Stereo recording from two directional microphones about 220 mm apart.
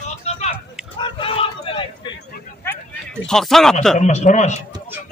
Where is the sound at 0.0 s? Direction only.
30° left (ahead or behind).